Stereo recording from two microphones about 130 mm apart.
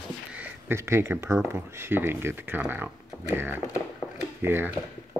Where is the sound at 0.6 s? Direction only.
20° right (ahead or behind).